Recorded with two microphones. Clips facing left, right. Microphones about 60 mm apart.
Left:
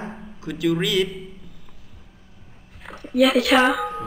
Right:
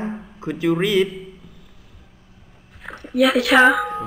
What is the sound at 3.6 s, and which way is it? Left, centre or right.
Speech, centre.